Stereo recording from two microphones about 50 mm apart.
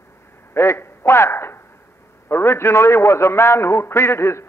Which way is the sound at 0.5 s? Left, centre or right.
Left.